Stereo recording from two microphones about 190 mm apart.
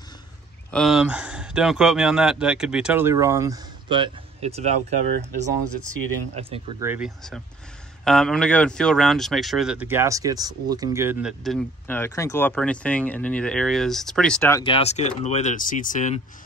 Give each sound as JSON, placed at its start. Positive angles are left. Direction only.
{"t": 0.7, "sound": "speech", "side_deg": 0}
{"t": 6.8, "sound": "speech", "side_deg": -10}
{"t": 8.0, "sound": "speech", "side_deg": 5}
{"t": 11.9, "sound": "speech", "side_deg": 15}
{"t": 14.6, "sound": "speech", "side_deg": 30}